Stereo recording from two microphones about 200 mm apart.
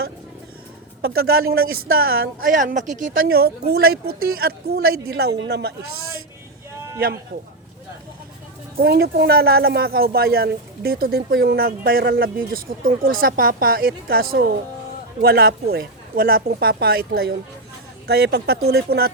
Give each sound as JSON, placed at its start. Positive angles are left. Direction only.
{"t": 1.0, "sound": "a woman's voice", "side_deg": -50}
{"t": 8.8, "sound": "a woman's voice", "side_deg": -50}